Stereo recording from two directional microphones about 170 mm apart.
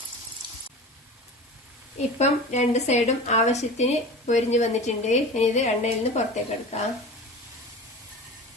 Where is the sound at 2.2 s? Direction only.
40° left (ahead or behind).